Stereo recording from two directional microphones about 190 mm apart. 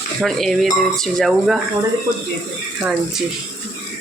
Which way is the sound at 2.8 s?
5° right (ahead or behind).